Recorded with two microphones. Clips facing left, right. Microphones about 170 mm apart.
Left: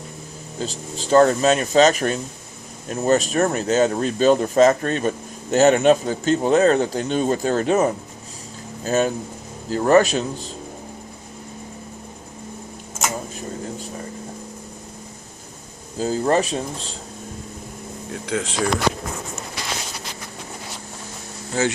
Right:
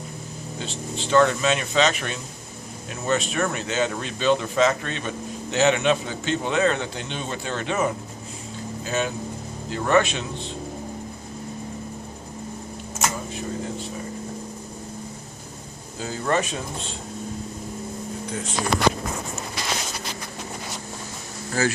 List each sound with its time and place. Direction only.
0.6 s speech: 40° left (ahead or behind)
16.0 s speech: 35° left (ahead or behind)
18.1 s a sound: 90° left
21.6 s speech: 20° left (ahead or behind)